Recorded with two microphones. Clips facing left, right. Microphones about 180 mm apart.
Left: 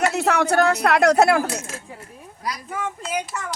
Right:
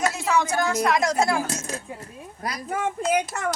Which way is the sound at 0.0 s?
65° left (ahead or behind).